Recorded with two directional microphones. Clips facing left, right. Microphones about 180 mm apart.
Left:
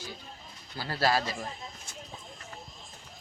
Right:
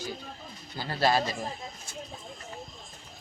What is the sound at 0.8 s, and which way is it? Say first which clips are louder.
Speech: right 2 dB; 20° right (ahead or behind).